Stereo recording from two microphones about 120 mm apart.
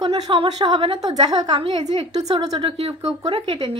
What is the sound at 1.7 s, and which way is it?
Speech, 60° right (ahead or behind).